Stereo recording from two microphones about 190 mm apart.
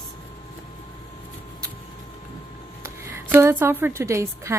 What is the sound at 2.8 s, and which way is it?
A woman's voice, 15° right (ahead or behind).